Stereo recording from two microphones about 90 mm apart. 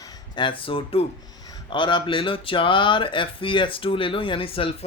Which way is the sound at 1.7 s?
65° left (ahead or behind).